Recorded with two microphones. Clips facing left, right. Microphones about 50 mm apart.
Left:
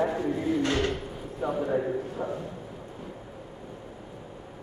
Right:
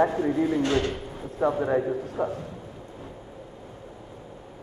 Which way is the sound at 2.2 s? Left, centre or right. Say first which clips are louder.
Right 5 dB; right.